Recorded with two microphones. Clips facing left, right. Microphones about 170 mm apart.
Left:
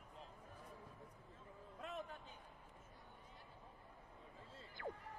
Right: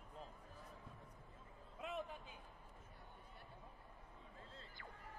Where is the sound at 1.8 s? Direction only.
5° right (ahead or behind).